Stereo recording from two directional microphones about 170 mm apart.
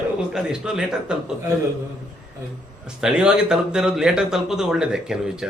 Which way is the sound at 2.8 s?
5° right (ahead or behind).